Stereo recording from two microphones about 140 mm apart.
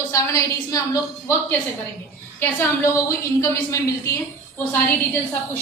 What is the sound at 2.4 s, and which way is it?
A woman's voice, 20° left (ahead or behind).